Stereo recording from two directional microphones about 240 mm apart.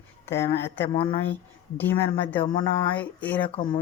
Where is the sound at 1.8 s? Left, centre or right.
Centre.